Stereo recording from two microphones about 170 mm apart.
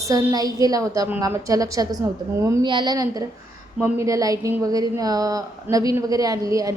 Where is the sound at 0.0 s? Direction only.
20° right (ahead or behind).